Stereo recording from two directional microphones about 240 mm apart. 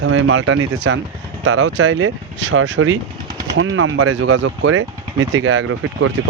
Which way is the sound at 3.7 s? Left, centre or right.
Right.